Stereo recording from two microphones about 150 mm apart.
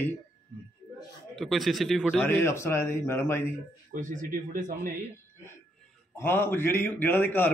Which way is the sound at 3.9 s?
60° right (ahead or behind).